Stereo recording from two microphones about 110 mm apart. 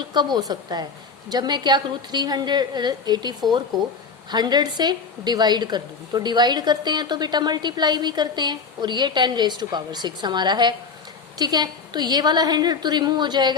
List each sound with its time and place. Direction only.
0.1 s a woman's voice: 40° right (ahead or behind)